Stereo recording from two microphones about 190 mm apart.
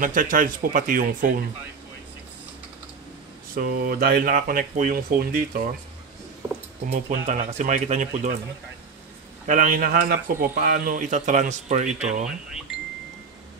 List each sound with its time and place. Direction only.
0.0 s speech: 45° right (ahead or behind)
3.5 s speech: 50° right (ahead or behind)
6.9 s speech: 40° right (ahead or behind)
9.5 s speech: 45° right (ahead or behind)
12.3 s speech: centre (ahead or behind)